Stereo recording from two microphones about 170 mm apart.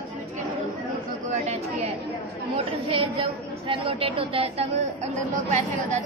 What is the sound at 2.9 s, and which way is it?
A woman's voice, 30° right (ahead or behind).